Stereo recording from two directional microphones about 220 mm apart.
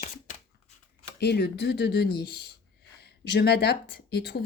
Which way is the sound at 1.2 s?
50° left (ahead or behind).